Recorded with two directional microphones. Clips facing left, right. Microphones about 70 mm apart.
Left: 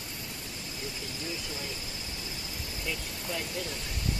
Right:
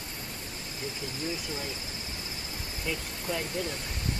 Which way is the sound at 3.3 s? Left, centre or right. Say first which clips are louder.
Right 3 dB; right.